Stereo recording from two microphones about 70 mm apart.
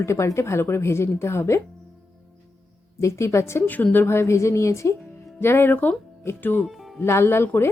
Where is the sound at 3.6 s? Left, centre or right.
Left.